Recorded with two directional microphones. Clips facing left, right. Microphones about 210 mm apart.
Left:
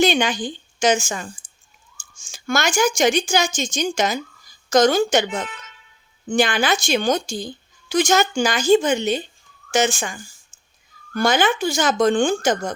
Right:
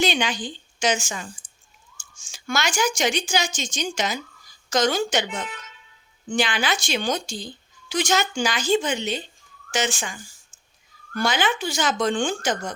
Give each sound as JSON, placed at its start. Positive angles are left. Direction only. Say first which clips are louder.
{"t": 0.0, "sound": "a woman's voice", "louder": "left 5 dB", "side_deg": 50}